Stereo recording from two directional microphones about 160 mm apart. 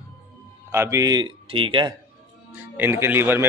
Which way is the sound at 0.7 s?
20° right (ahead or behind).